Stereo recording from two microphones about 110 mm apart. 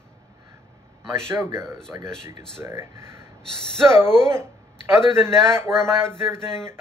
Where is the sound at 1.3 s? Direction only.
25° right (ahead or behind).